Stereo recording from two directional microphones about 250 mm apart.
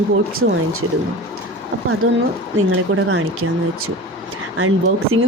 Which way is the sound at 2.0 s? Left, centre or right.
Right.